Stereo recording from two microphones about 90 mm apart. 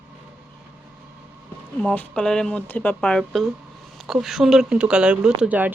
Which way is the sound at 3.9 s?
5° right (ahead or behind).